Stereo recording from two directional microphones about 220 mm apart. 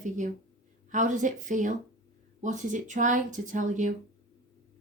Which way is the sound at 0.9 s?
35° right (ahead or behind).